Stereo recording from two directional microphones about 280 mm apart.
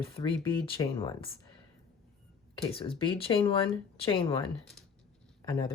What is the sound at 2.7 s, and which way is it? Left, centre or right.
Speech, centre.